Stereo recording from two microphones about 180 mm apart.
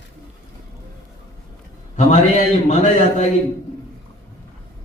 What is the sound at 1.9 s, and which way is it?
Speech, 40° left (ahead or behind).